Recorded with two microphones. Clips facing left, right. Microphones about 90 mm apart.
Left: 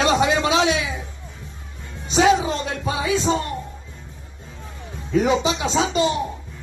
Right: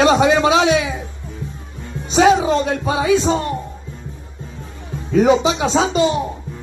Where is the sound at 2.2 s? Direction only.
30° right (ahead or behind).